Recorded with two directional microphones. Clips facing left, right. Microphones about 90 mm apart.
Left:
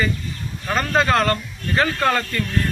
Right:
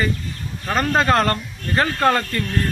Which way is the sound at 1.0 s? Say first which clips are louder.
Even; 40° right (ahead or behind).